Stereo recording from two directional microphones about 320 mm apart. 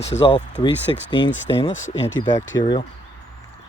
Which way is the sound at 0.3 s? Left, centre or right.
Centre.